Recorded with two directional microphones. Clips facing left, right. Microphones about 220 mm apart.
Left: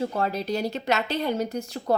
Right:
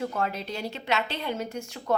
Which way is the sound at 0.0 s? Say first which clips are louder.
Left 3 dB; 35° left (ahead or behind).